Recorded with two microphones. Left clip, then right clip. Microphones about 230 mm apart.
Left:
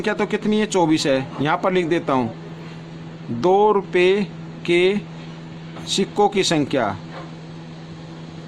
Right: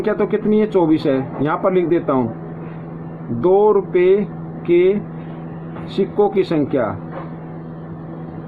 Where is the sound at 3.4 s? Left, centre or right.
Left.